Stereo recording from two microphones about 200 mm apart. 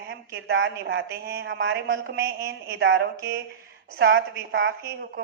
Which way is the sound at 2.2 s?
50° right (ahead or behind).